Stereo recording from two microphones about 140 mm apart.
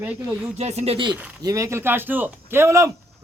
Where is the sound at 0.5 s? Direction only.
50° right (ahead or behind).